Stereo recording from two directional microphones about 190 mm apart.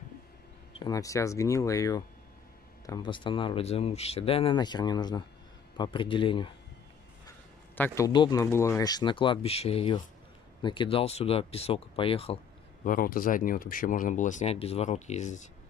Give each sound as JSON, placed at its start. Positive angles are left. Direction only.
{"t": 0.7, "sound": "speech", "side_deg": 20}
{"t": 7.2, "sound": "speech", "side_deg": 10}
{"t": 12.8, "sound": "speech", "side_deg": 45}